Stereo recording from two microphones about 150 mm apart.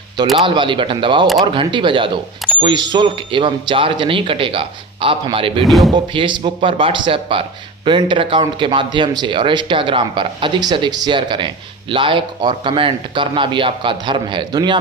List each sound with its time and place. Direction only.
0.3 s a man's voice: 35° right (ahead or behind)
5.6 s speech: centre (ahead or behind)
5.9 s a man's voice: 30° right (ahead or behind)